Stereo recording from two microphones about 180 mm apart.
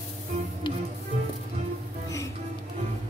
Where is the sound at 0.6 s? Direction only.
25° left (ahead or behind).